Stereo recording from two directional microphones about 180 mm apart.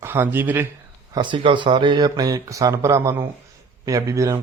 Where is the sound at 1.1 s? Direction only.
25° right (ahead or behind).